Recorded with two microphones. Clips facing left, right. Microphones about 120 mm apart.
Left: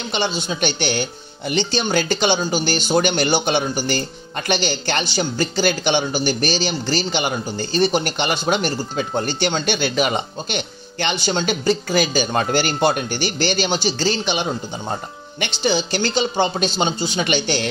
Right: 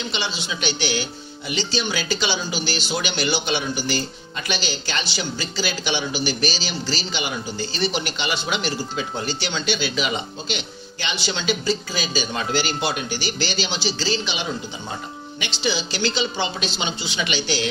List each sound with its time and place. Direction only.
0.1 s speech: 50° left (ahead or behind)